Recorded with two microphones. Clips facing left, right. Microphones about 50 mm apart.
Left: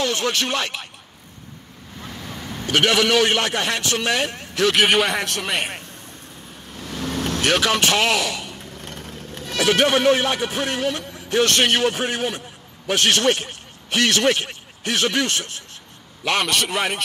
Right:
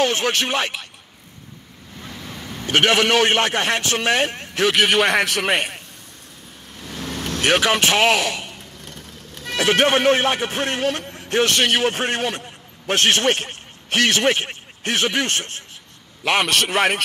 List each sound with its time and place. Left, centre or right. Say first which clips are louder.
0.0 s speech: right 2 dB; right
2.0 s vehicle: left 1 dB; centre
2.6 s a man's voice: right 1 dB; right
5.0 s a man's voice: right 5 dB; right
6.9 s vehicle: left 3 dB; centre
7.4 s speech: right 2 dB; right
9.6 s a man's voice: right 1 dB; right
11.5 s a man's voice: even; centre
11.9 s a man's voice: right 1 dB; right
13.0 s a man's voice: even; right
13.4 s a sound: right 2 dB; right
14.0 s a man's voice: even; right
16.4 s a man's voice: right 3 dB; right